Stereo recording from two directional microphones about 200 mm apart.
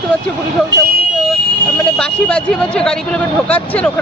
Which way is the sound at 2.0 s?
5° left (ahead or behind).